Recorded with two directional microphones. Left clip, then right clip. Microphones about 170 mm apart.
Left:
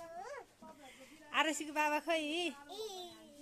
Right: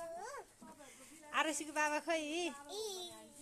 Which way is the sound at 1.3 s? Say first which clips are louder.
Left 2 dB; 25° left (ahead or behind).